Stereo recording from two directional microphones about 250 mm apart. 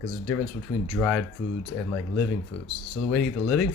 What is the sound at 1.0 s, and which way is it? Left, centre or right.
Speech, centre.